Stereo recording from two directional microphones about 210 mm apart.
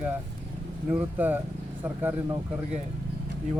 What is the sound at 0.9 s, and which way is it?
Speech, 10° right (ahead or behind).